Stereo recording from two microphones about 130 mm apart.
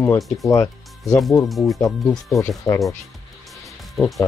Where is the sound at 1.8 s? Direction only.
25° left (ahead or behind).